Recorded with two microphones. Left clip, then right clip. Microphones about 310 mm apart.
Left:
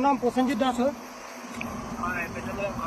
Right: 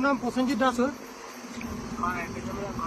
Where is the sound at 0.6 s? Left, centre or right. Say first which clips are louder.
Right 1 dB; right.